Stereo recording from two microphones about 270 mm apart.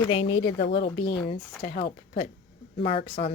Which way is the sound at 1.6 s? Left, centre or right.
Left.